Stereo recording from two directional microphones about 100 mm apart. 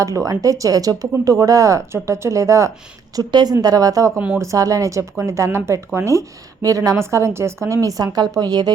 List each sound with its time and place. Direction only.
0.0 s speech: 35° right (ahead or behind)